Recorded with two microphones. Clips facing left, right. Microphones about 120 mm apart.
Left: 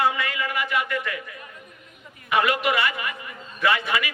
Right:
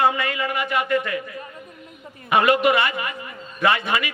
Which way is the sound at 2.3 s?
30° right (ahead or behind).